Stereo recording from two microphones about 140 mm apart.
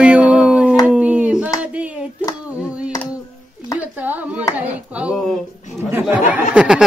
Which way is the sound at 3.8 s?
10° right (ahead or behind).